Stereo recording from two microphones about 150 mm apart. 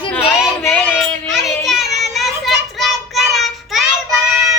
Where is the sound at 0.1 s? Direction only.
15° left (ahead or behind).